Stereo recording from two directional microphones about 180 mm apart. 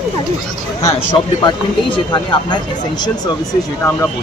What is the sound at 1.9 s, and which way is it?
Speech, 25° left (ahead or behind).